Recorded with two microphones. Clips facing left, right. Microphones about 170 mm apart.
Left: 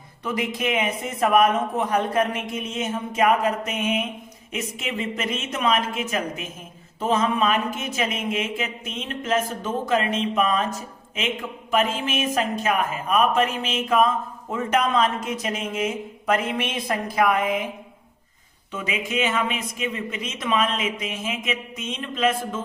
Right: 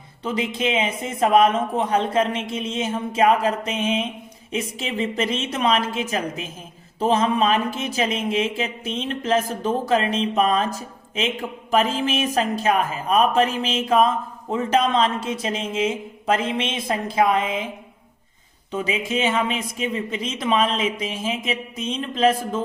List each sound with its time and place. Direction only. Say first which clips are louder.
0.3 s speech: right 2 dB; 25° right (ahead or behind)
18.7 s speech: right 3 dB; 30° right (ahead or behind)